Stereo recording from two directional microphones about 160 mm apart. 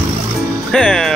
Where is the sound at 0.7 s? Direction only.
5° left (ahead or behind).